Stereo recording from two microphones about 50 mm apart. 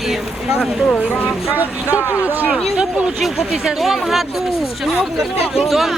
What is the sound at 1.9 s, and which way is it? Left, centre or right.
Speech, left.